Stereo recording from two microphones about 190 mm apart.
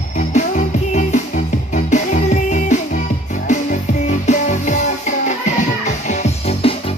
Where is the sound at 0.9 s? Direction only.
40° left (ahead or behind).